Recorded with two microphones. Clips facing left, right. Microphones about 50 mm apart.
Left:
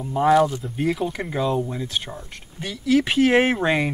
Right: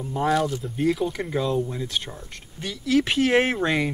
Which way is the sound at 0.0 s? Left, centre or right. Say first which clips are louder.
Left 5 dB; centre.